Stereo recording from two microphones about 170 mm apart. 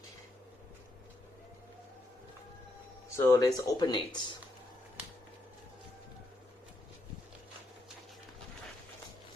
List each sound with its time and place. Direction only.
3.2 s speech: 15° left (ahead or behind)